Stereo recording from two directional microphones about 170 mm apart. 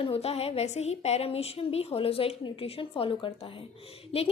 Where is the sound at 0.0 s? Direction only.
35° left (ahead or behind).